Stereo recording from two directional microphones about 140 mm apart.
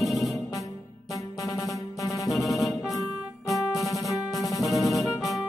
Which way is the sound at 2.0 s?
25° left (ahead or behind).